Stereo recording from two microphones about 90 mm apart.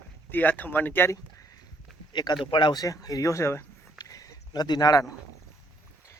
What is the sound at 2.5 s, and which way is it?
Speech, 65° left (ahead or behind).